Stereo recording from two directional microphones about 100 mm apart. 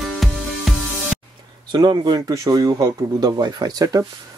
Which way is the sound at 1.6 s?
50° right (ahead or behind).